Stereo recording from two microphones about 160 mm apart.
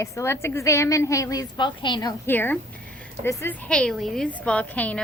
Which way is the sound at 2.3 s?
10° left (ahead or behind).